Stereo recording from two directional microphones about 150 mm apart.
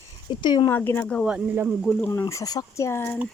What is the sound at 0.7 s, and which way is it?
Speech, 15° left (ahead or behind).